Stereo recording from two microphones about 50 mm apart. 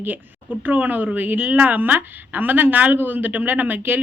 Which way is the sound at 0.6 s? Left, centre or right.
Right.